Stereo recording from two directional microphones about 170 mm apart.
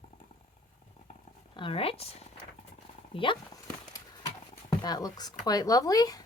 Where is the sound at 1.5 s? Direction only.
30° left (ahead or behind).